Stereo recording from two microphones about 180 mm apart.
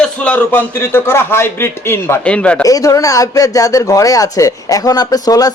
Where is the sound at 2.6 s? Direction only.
20° left (ahead or behind).